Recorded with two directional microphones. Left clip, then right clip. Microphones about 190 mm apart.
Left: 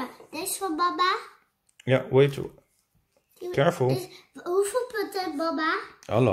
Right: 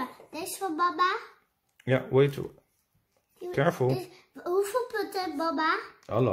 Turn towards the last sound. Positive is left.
turn(degrees=15)  # may be behind; listen again after turning